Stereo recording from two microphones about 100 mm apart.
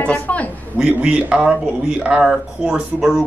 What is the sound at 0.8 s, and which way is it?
A man's voice, 10° right (ahead or behind).